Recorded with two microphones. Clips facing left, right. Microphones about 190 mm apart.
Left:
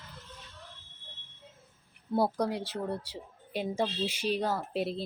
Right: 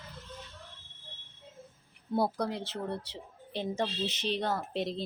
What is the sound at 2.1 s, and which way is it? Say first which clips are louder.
Speech: left 2 dB; 10° left (ahead or behind).